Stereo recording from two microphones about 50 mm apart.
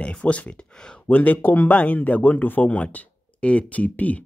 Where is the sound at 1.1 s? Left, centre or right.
Left.